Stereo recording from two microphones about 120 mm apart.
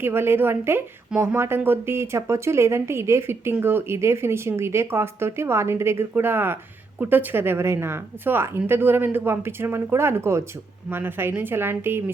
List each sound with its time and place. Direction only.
0.0 s a woman's voice: 20° right (ahead or behind)